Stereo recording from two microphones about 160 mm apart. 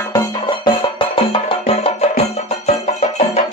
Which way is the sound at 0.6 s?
35° left (ahead or behind).